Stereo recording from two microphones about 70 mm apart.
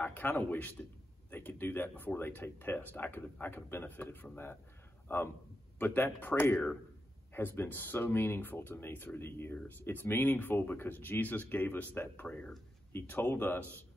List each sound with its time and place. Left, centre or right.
0.0 s a man's voice: left